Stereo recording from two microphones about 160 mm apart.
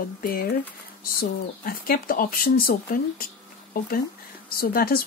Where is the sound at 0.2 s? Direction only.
65° left (ahead or behind).